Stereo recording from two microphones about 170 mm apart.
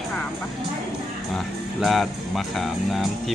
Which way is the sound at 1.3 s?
Centre (ahead or behind).